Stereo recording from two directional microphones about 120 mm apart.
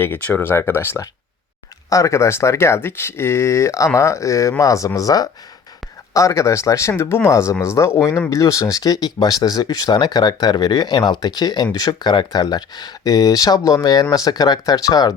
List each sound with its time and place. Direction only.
0.0 s speech: 15° left (ahead or behind)